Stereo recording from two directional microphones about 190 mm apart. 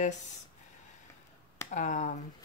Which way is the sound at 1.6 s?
40° left (ahead or behind).